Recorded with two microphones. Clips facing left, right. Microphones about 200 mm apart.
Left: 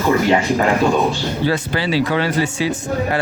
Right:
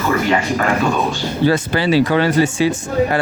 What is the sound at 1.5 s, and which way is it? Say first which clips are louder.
Speech: right 5 dB; 50° right (ahead or behind).